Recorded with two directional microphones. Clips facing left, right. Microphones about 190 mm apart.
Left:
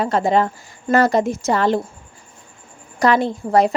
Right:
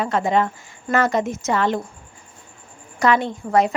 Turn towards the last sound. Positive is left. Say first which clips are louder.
# left 3 dB
turn(degrees=35)  # may be behind; listen again after turning